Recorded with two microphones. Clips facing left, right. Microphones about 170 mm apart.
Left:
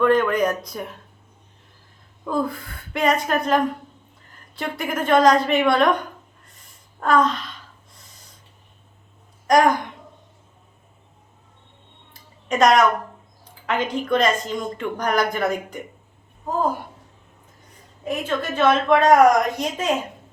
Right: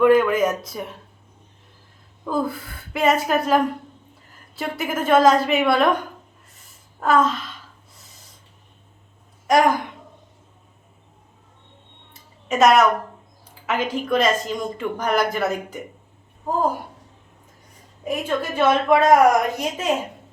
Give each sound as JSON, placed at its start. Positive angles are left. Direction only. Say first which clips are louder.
{"t": 0.0, "sound": "a woman's voice", "louder": "right 2 dB", "side_deg": -5}
{"t": 2.2, "sound": "a woman's voice", "louder": "even", "side_deg": -5}
{"t": 7.0, "sound": "a woman's voice", "louder": "even", "side_deg": -5}
{"t": 9.5, "sound": "a woman's voice", "louder": "left 1 dB", "side_deg": -5}
{"t": 12.5, "sound": "a woman's voice", "louder": "right 1 dB", "side_deg": -5}
{"t": 18.0, "sound": "a woman's voice", "louder": "right 1 dB", "side_deg": -10}